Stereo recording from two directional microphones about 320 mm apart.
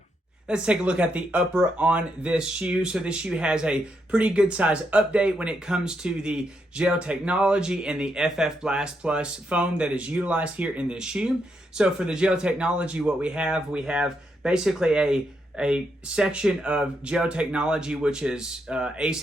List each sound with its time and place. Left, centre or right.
0.4 s speech: centre